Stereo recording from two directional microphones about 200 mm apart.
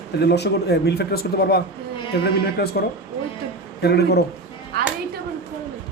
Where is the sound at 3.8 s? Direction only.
55° left (ahead or behind).